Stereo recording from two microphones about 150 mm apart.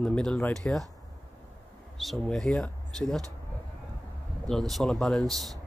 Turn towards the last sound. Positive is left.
turn(degrees=0)  # may be behind; listen again after turning